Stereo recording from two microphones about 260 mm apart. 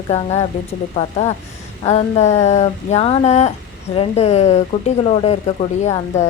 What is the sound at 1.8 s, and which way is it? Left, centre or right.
Speech, left.